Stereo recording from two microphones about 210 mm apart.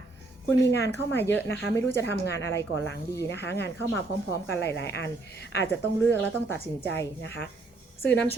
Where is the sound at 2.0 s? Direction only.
55° left (ahead or behind).